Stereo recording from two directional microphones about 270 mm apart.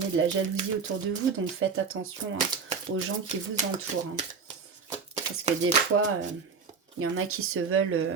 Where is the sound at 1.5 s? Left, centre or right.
Right.